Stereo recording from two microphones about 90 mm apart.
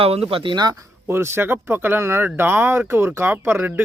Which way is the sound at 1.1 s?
25° right (ahead or behind).